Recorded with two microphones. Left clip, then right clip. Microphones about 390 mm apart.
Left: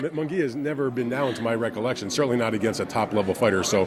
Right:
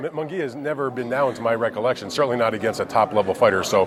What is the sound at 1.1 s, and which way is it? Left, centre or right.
A man's voice, right.